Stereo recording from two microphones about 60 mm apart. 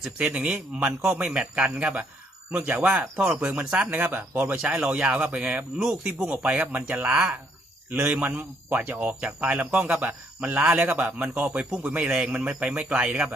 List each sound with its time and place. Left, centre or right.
0.3 s speech: right
5.7 s speech: centre
6.1 s speech: right
7.1 s speech: centre